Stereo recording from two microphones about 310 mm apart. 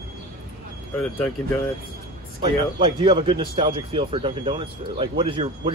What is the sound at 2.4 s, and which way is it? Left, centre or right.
Speech, centre.